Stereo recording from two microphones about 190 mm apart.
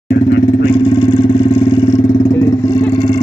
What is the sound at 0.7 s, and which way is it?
Vehicle, 25° left (ahead or behind).